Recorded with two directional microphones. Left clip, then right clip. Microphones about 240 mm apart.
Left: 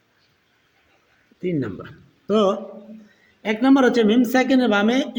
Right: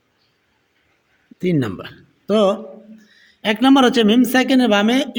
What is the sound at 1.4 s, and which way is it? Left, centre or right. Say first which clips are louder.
Speech: right 5 dB; right.